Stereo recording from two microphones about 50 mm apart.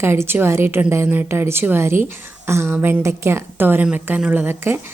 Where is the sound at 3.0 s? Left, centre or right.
Right.